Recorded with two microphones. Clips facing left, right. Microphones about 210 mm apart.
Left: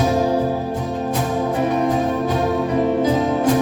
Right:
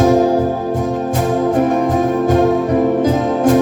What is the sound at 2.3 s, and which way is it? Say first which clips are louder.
Music: right 6 dB; 50° right (ahead or behind).